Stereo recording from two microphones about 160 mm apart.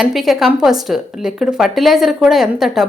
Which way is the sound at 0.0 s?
Centre (ahead or behind).